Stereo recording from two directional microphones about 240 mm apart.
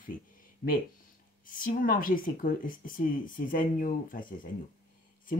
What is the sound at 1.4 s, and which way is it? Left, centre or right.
Speech, left.